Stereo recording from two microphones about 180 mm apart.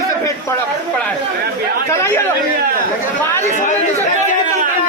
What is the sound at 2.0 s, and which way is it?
Speech, 10° left (ahead or behind).